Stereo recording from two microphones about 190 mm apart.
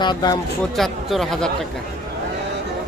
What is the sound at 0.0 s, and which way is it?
Speech, 20° left (ahead or behind).